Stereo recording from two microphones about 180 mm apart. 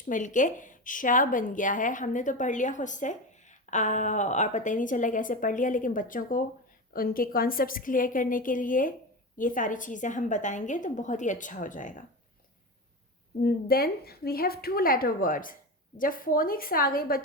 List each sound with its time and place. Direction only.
0.1 s a woman's voice: 45° left (ahead or behind)
13.4 s a woman's voice: 60° left (ahead or behind)